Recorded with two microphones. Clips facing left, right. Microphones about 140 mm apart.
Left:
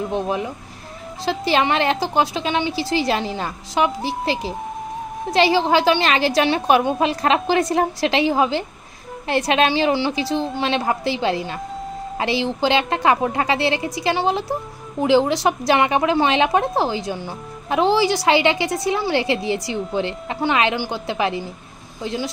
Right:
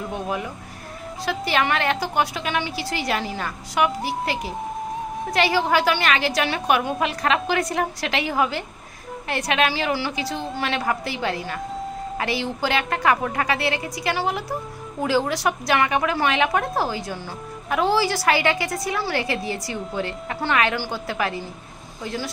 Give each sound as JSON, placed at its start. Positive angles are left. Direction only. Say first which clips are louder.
{"t": 0.1, "sound": "a woman's voice", "louder": "left 5 dB", "side_deg": 25}